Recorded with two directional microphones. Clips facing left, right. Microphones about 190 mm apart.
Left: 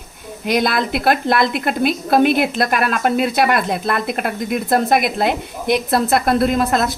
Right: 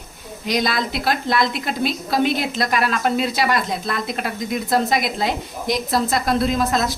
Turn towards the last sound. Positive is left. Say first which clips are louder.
# left 3 dB
turn(degrees=60)  # may be behind; listen again after turning